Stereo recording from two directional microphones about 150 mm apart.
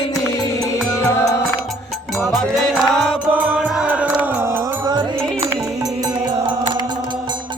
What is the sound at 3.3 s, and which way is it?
Music, 10° right (ahead or behind).